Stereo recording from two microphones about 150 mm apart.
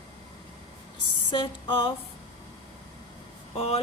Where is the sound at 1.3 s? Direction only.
35° left (ahead or behind).